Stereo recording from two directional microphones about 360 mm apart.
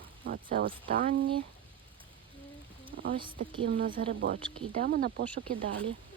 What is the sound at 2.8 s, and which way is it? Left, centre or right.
A woman's voice, centre.